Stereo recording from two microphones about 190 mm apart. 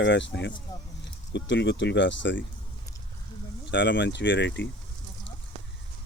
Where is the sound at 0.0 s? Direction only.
70° left (ahead or behind).